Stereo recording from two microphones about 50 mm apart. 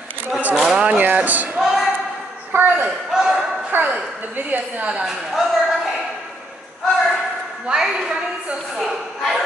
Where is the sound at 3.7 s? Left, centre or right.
Right.